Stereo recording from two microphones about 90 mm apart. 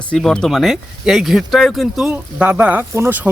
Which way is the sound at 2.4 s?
15° right (ahead or behind).